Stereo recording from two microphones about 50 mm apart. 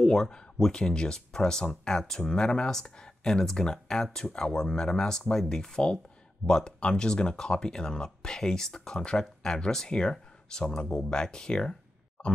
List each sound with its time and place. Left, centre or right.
0.0 s speech: centre